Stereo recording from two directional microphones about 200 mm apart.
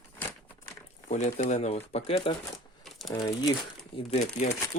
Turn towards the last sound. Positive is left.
turn(degrees=30)  # may be behind; listen again after turning